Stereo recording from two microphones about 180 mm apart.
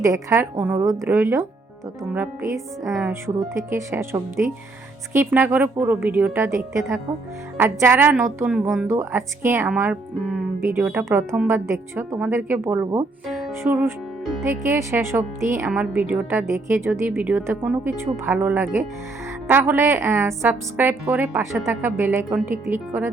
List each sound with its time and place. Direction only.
0.0 s speech: 15° right (ahead or behind)
7.6 s speech: 15° right (ahead or behind)
13.2 s music: centre (ahead or behind)
13.6 s speech: 10° right (ahead or behind)